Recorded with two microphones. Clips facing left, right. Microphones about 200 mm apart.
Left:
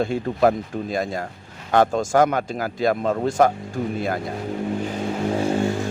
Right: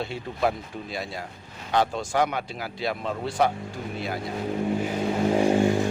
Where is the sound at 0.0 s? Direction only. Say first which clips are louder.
Left 8 dB; 50° left (ahead or behind).